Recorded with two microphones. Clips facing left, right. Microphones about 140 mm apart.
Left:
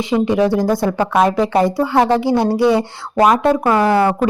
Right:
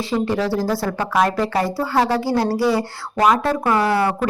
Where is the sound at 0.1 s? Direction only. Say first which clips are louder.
Left 6 dB; 20° left (ahead or behind).